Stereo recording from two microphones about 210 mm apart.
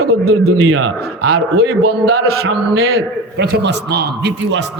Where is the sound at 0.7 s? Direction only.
90° right.